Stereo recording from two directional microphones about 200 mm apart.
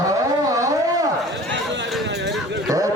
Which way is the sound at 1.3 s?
60° right (ahead or behind).